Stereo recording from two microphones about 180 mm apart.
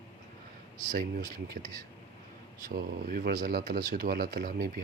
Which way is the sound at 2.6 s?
55° right (ahead or behind).